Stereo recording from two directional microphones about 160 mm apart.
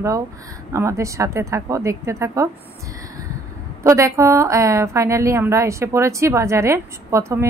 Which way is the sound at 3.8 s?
20° right (ahead or behind).